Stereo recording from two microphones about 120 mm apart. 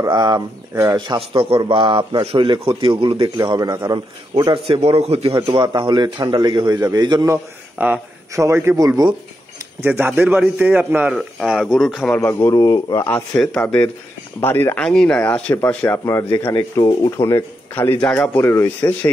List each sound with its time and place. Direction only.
0.0 s a man's voice: 35° right (ahead or behind)
4.7 s a man's voice: 60° right (ahead or behind); by 7.3 s 35° right (ahead or behind)
7.8 s a man's voice: 15° right (ahead or behind); by 9.1 s 30° right (ahead or behind)
9.8 s a man's voice: 15° right (ahead or behind)
11.7 s speech: 5° right (ahead or behind)
12.2 s speech: 20° left (ahead or behind)
13.6 s speech: 10° left (ahead or behind)
14.8 s speech: 5° left (ahead or behind)
16.1 s speech: 25° left (ahead or behind)